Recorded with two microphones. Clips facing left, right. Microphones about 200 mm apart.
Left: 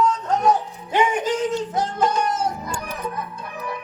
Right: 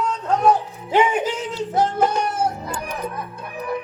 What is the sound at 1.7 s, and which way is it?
Speech, 60° right (ahead or behind).